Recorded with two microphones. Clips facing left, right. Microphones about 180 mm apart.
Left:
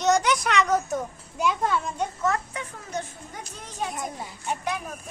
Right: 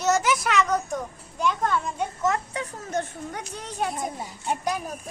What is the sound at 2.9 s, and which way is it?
A child's voice, 60° right (ahead or behind).